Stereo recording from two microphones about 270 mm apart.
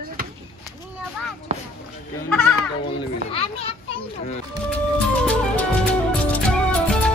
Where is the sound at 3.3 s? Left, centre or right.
Left.